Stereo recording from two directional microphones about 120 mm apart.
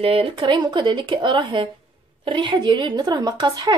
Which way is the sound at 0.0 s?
50° right (ahead or behind).